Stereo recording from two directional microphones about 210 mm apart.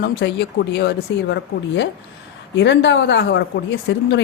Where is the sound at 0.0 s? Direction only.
50° left (ahead or behind).